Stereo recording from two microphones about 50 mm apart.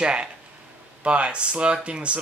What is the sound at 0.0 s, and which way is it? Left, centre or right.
Speech, centre.